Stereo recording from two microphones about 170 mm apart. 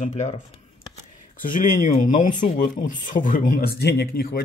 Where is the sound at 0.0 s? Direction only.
45° left (ahead or behind).